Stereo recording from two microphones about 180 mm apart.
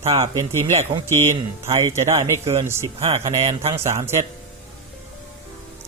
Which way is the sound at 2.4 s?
15° right (ahead or behind).